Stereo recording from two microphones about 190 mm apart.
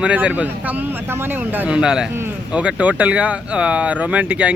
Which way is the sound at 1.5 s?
5° right (ahead or behind).